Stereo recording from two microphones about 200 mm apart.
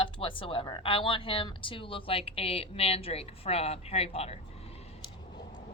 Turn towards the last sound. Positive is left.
turn(degrees=30)  # may be behind; listen again after turning